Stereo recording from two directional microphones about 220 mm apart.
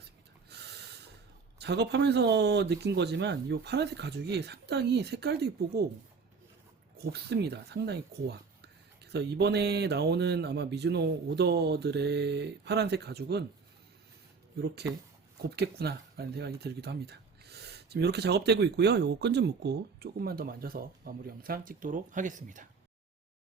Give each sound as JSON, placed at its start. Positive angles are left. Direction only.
{"t": 0.5, "sound": "snort", "side_deg": -50}
{"t": 1.5, "sound": "speech", "side_deg": -50}
{"t": 6.9, "sound": "speech", "side_deg": -45}
{"t": 15.4, "sound": "speech", "side_deg": -45}